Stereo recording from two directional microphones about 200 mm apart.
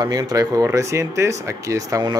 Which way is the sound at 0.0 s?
20° right (ahead or behind).